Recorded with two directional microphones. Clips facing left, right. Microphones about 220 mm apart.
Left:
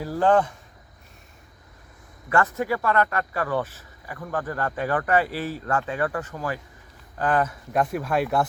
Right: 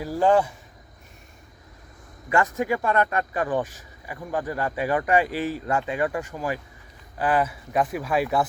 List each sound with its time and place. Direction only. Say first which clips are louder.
0.0 s speech: even; 10° right (ahead or behind)
2.3 s speech: even; 15° right (ahead or behind)